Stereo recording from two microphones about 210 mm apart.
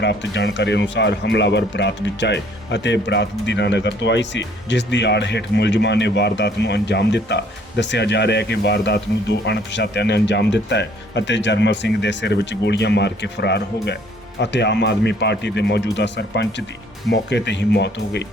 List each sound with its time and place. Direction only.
0.0 s speech: 55° left (ahead or behind)